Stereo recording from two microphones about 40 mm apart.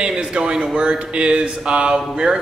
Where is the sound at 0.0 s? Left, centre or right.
Right.